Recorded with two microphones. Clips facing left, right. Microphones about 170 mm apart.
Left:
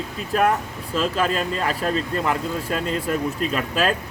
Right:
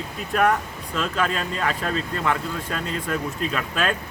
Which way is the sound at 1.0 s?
35° left (ahead or behind).